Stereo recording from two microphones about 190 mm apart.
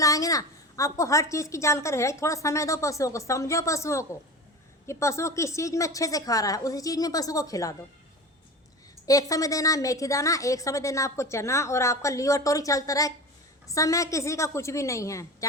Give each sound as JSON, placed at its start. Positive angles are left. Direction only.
{"t": 0.0, "sound": "a woman's voice", "side_deg": 20}
{"t": 9.0, "sound": "a woman's voice", "side_deg": 20}